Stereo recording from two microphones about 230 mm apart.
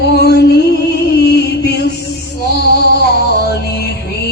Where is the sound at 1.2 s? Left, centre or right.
Left.